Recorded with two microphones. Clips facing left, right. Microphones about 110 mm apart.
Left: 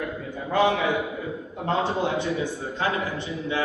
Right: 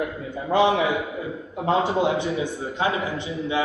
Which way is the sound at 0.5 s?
20° right (ahead or behind).